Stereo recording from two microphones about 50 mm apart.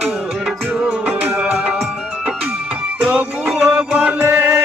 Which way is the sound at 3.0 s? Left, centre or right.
Right.